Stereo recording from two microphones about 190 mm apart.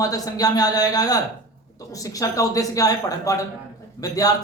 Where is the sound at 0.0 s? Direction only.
20° left (ahead or behind).